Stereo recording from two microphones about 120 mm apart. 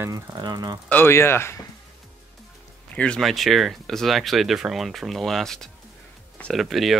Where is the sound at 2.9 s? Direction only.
10° left (ahead or behind).